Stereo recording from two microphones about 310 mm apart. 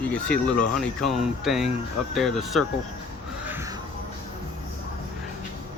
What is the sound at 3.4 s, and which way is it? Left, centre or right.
Music, centre.